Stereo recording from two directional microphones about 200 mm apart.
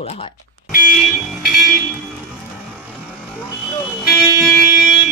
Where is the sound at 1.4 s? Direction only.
Centre (ahead or behind).